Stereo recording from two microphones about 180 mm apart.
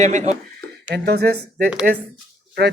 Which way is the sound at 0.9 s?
65° right (ahead or behind).